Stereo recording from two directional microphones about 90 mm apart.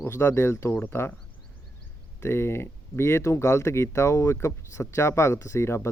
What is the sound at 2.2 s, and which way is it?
Speech, 30° left (ahead or behind).